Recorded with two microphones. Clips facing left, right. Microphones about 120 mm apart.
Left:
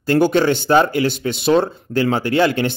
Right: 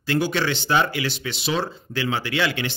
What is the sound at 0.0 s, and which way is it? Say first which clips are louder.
Speech: left 8 dB; 50° left (ahead or behind).